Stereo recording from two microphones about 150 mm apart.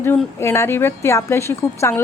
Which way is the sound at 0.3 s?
15° left (ahead or behind).